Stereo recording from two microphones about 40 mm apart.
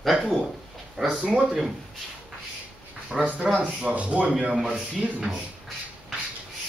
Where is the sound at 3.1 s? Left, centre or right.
Centre.